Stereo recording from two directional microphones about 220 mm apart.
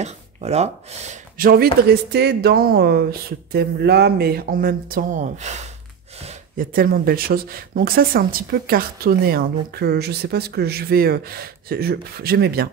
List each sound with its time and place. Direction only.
0.0 s speech: 30° right (ahead or behind)
1.4 s speech: 45° right (ahead or behind)